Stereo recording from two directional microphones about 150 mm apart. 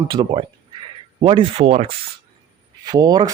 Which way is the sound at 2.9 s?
25° right (ahead or behind).